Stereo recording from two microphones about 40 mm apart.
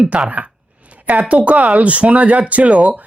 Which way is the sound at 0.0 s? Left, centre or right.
Right.